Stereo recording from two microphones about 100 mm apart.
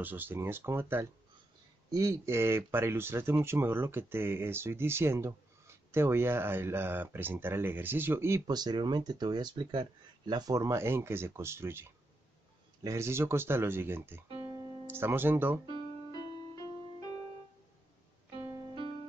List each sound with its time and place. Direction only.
0.0 s speech: 20° right (ahead or behind)
8.5 s speech: 45° right (ahead or behind); by 11.8 s 25° right (ahead or behind)
12.8 s speech: 30° right (ahead or behind)
14.4 s music: 40° right (ahead or behind)
14.9 s speech: 20° right (ahead or behind)
16.1 s music: 45° left (ahead or behind)